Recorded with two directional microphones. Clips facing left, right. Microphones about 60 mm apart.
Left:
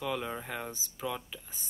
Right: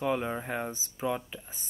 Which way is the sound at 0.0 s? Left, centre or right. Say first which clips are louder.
Right 5 dB; right.